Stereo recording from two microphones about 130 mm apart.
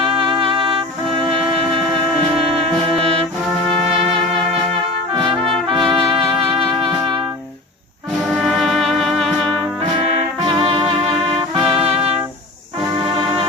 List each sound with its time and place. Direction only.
0.3 s music: 40° right (ahead or behind)
3.9 s music: 40° right (ahead or behind)
5.7 s trumpet: centre (ahead or behind)
8.3 s music: centre (ahead or behind)
10.4 s music: 40° right (ahead or behind)
11.6 s music: centre (ahead or behind)